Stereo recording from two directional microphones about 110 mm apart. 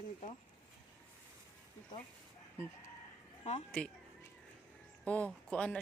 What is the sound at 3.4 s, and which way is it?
Speech, 60° left (ahead or behind).